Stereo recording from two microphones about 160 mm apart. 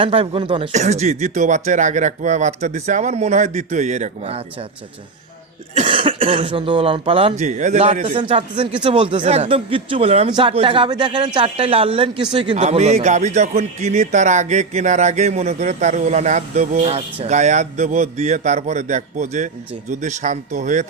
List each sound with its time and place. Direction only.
0.0 s speech: 35° right (ahead or behind)
0.7 s a man's voice: 45° right (ahead or behind)
5.7 s speech: 35° right (ahead or behind)
12.5 s a man's voice: 45° right (ahead or behind)